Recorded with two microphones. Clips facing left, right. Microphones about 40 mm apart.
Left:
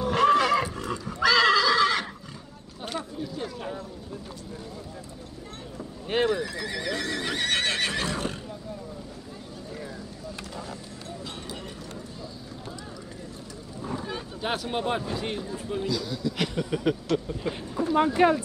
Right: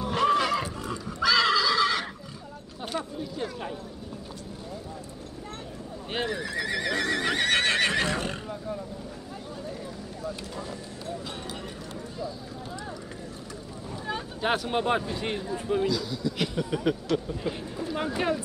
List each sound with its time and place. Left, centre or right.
0.0 s neigh: centre
3.0 s a sound: right
6.0 s neigh: left
6.5 s horse: right
6.9 s neigh: right
14.0 s boat: right
14.7 s speech: right
15.9 s a man's voice: centre
17.7 s speech: left
18.0 s speech: centre